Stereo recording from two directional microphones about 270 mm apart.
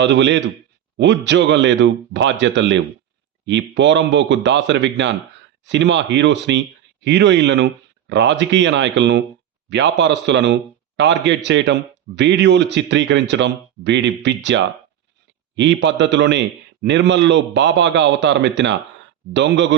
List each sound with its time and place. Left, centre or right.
0.0 s a man's voice: right